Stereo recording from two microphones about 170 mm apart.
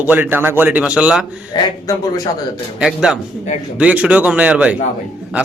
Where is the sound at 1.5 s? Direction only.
20° left (ahead or behind).